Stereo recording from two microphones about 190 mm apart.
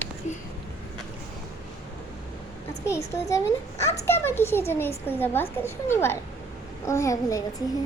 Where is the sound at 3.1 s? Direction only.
15° left (ahead or behind).